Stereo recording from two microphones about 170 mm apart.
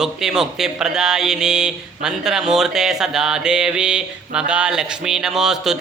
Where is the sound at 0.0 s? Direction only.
5° right (ahead or behind).